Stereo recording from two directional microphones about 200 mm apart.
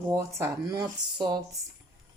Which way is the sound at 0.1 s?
15° right (ahead or behind).